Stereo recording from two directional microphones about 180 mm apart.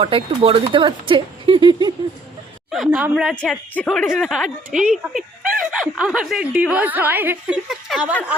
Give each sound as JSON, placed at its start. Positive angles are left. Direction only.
{"t": 0.0, "sound": "speech", "side_deg": -30}
{"t": 2.6, "sound": "speech", "side_deg": 0}